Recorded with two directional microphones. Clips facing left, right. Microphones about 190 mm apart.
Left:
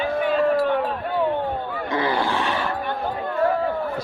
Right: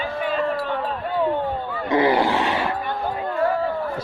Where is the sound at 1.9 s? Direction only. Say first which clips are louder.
Right 5 dB; 20° right (ahead or behind).